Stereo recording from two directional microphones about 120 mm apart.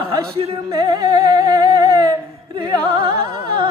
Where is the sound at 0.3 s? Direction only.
50° right (ahead or behind).